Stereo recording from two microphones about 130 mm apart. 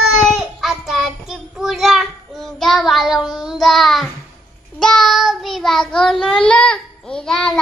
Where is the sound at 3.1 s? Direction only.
30° left (ahead or behind).